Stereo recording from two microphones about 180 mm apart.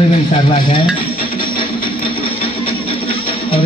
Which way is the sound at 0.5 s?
30° left (ahead or behind).